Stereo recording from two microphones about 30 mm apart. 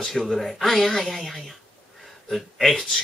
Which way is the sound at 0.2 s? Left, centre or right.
Centre.